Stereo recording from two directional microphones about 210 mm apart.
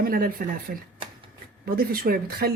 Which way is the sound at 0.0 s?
45° right (ahead or behind).